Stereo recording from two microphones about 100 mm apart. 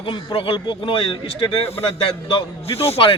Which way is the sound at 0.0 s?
55° left (ahead or behind).